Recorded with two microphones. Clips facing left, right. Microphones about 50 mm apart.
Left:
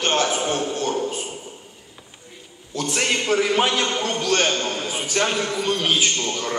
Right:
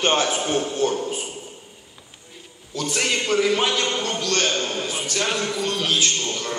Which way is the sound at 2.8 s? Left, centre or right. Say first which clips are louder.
Left 1 dB; centre.